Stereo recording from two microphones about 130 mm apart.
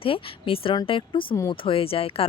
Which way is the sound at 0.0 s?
45° left (ahead or behind).